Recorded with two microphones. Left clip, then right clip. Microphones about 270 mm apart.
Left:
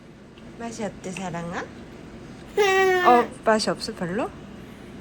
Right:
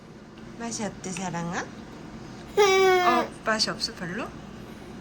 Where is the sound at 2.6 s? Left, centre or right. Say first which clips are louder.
Even; centre.